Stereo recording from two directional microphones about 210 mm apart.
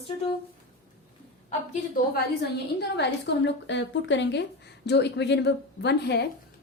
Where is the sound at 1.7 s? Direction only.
50° left (ahead or behind).